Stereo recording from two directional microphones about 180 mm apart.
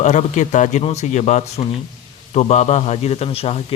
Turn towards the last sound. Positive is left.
turn(degrees=35)  # may be behind; listen again after turning